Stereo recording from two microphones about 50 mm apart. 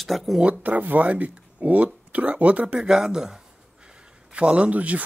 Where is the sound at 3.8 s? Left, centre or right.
Right.